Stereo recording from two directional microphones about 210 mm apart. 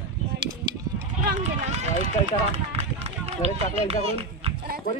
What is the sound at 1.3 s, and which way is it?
Speech, 30° right (ahead or behind).